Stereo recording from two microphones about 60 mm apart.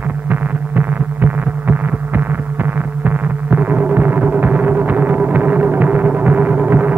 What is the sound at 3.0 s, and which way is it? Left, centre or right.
Throbbing, right.